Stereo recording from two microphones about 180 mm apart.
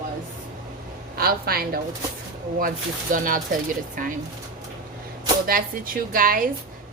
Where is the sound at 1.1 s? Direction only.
55° right (ahead or behind).